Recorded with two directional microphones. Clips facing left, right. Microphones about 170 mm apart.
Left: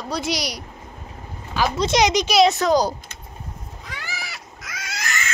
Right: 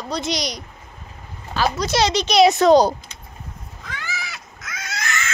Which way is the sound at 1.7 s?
20° left (ahead or behind).